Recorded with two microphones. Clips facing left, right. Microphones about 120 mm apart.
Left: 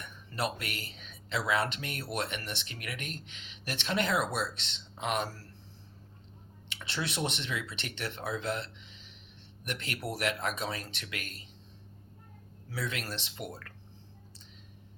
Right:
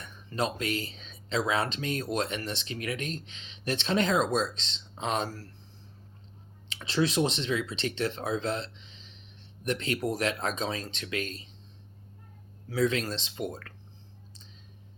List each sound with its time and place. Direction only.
0.0 s speech: 20° right (ahead or behind)
6.7 s speech: 25° right (ahead or behind)
12.7 s speech: 20° right (ahead or behind)